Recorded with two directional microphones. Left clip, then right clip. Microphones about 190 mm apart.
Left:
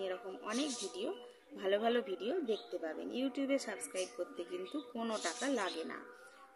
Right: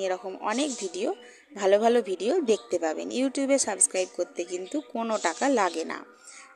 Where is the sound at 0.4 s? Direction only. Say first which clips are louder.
Right 9 dB; 30° right (ahead or behind).